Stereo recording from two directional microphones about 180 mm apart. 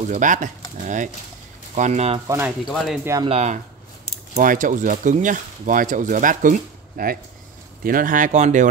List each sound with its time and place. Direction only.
0.1 s speech: 45° right (ahead or behind)
2.2 s speech: 15° right (ahead or behind)
2.7 s speech: centre (ahead or behind)
3.3 s speech: 40° right (ahead or behind)